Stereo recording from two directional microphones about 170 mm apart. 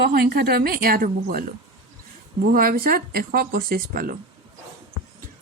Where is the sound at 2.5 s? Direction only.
60° right (ahead or behind).